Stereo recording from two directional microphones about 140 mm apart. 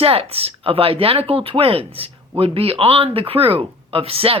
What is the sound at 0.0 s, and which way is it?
Speech, 45° right (ahead or behind).